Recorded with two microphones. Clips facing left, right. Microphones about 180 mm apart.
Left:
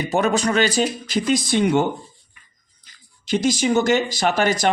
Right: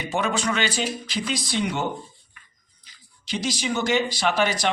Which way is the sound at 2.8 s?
50° left (ahead or behind).